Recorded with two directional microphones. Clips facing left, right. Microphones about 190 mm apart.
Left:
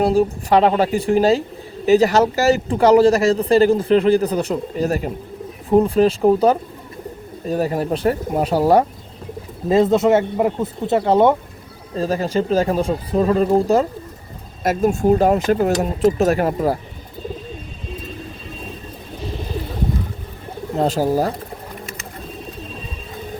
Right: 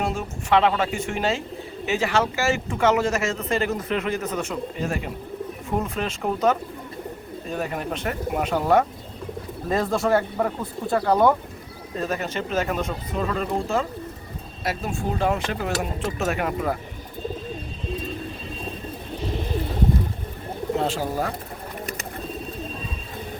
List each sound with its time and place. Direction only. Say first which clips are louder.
0.0 s speech: left 11 dB; 35° left (ahead or behind)
9.6 s speech: left 8 dB; 25° left (ahead or behind)
20.7 s speech: left 8 dB; 40° left (ahead or behind)